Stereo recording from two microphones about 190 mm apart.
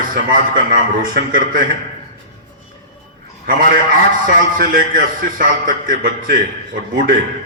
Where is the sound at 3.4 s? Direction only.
45° right (ahead or behind).